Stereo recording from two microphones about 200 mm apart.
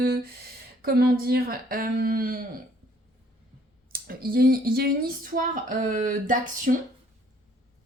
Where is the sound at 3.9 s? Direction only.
50° right (ahead or behind).